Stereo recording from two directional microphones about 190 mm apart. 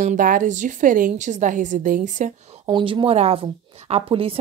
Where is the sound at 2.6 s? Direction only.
25° right (ahead or behind).